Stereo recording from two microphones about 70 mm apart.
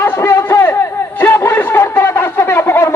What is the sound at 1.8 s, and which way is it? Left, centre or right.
Shofar, left.